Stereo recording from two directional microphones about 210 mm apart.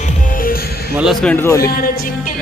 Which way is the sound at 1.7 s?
45° left (ahead or behind).